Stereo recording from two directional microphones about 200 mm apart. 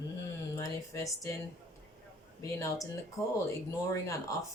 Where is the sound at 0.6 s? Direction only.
15° left (ahead or behind).